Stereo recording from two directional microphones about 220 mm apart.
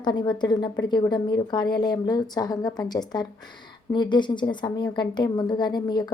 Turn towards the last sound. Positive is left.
turn(degrees=20)  # may be behind; listen again after turning